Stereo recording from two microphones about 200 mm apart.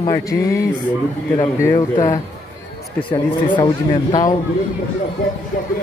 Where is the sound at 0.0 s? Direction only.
15° left (ahead or behind).